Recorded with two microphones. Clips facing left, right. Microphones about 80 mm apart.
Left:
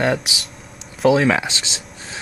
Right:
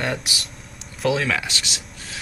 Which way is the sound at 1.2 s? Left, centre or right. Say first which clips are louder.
Left 6 dB; left.